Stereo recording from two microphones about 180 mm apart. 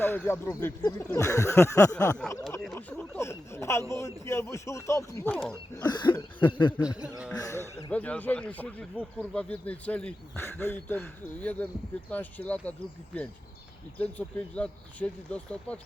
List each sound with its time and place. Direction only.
0.0 s speech: 10° left (ahead or behind)
2.1 s speech: 5° left (ahead or behind)
5.9 s cough: 25° left (ahead or behind)
6.8 s speech: 5° right (ahead or behind)
7.3 s speech: 15° left (ahead or behind)
14.0 s speech: 5° left (ahead or behind)